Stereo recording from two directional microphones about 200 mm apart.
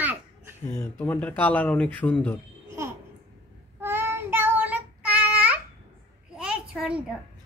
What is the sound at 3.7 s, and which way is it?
Child singing, 10° right (ahead or behind).